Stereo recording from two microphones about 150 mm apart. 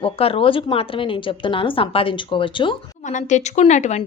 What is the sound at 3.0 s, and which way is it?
Speech, 55° left (ahead or behind).